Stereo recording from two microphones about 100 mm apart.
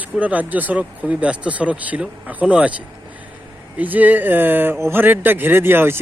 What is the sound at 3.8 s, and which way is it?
A man's voice, 15° right (ahead or behind).